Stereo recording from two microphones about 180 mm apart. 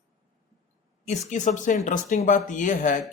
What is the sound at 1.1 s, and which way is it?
Speech, 40° left (ahead or behind).